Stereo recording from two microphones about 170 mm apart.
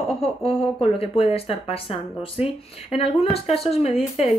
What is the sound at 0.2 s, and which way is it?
Speech, 35° left (ahead or behind).